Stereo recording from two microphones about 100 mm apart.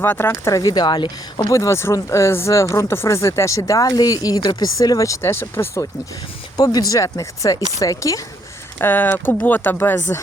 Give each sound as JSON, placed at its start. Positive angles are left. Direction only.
{"t": 0.0, "sound": "speech", "side_deg": 20}
{"t": 1.5, "sound": "speech", "side_deg": 30}
{"t": 6.6, "sound": "speech", "side_deg": 40}
{"t": 8.8, "sound": "speech", "side_deg": 20}